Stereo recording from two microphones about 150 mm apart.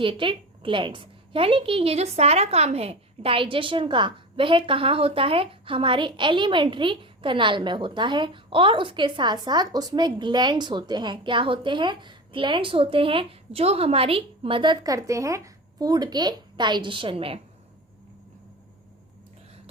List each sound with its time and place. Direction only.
0.0 s a woman's voice: 35° right (ahead or behind)